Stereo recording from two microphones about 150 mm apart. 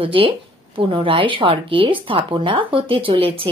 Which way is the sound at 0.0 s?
35° right (ahead or behind).